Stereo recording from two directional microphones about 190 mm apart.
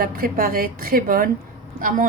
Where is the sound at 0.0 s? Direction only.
50° right (ahead or behind).